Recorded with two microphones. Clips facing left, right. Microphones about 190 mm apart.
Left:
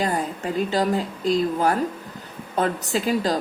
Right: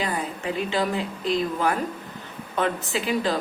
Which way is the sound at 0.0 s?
40° left (ahead or behind).